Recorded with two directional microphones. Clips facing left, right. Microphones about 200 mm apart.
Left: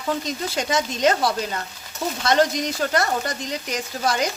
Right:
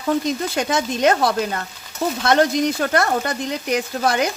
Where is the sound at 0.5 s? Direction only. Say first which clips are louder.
Right 3 dB; 55° right (ahead or behind).